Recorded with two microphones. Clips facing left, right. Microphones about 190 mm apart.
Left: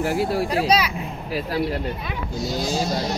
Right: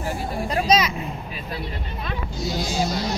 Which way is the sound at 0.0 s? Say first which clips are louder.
Left 6 dB; 90° left.